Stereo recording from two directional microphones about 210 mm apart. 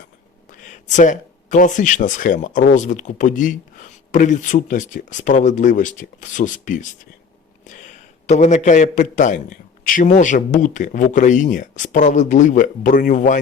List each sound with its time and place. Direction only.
0.7 s a man's voice: 35° left (ahead or behind)